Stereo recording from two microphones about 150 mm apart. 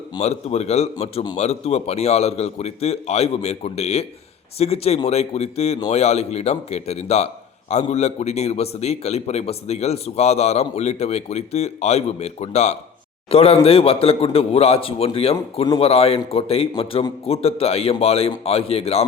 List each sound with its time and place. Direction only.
0.2 s a man's voice: 45° left (ahead or behind)